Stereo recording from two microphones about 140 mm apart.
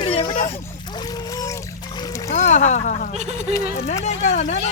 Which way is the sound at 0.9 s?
30° left (ahead or behind).